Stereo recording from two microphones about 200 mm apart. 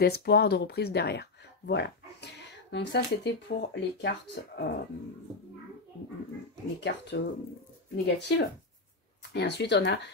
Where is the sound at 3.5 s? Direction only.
45° left (ahead or behind).